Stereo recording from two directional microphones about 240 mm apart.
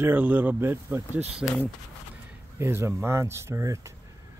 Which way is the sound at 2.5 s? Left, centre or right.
Centre.